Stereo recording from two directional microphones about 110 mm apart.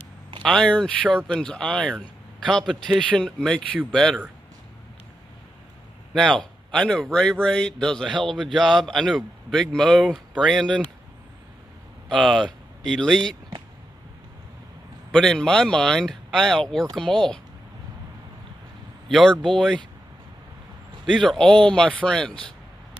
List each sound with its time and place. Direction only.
0.4 s speech: 5° left (ahead or behind)
6.1 s speech: 5° left (ahead or behind)
12.1 s speech: 5° left (ahead or behind)
15.1 s speech: 5° left (ahead or behind)
19.0 s speech: centre (ahead or behind)
21.0 s speech: centre (ahead or behind)